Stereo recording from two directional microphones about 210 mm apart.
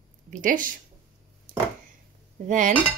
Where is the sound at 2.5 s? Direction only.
35° right (ahead or behind).